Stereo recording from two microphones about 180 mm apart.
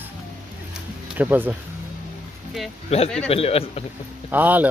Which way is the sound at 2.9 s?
35° left (ahead or behind).